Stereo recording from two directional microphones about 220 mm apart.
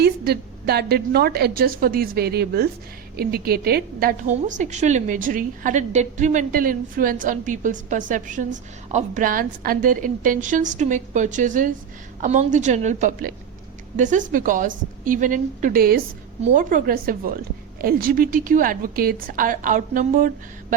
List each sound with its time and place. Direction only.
0.0 s a woman's voice: 45° right (ahead or behind)